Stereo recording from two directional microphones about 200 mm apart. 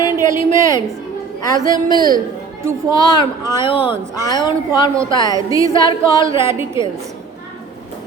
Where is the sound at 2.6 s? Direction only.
15° right (ahead or behind).